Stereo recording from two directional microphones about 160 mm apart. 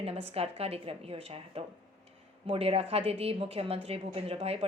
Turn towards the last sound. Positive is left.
turn(degrees=-40)  # may be behind; listen again after turning